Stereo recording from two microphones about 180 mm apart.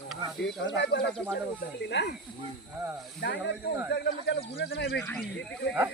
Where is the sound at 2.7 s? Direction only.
10° right (ahead or behind).